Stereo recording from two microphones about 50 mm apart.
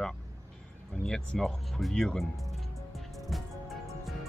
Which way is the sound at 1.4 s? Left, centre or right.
Centre.